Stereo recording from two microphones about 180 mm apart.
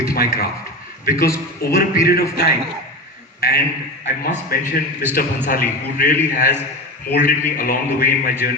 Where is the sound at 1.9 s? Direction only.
55° left (ahead or behind).